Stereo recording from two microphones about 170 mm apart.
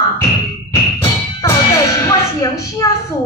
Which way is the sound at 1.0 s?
20° left (ahead or behind).